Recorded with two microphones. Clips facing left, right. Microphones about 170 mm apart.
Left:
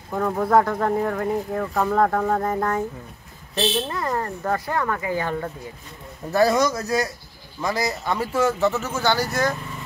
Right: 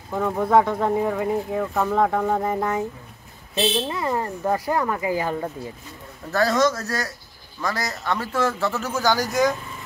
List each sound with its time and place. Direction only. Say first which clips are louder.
0.1 s speech: even; centre (ahead or behind)
6.3 s a man's voice: left 1 dB; 15° left (ahead or behind)
8.1 s a man's voice: left 1 dB; 10° left (ahead or behind)
8.8 s speech: even; 10° right (ahead or behind)